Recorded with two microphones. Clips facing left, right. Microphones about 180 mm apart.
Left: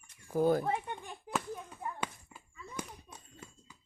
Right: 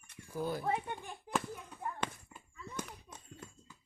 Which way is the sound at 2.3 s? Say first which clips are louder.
Even; 10° left (ahead or behind).